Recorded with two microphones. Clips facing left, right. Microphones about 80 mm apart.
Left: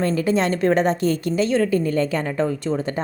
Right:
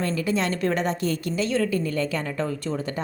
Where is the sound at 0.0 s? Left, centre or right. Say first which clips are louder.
Left 5 dB; left.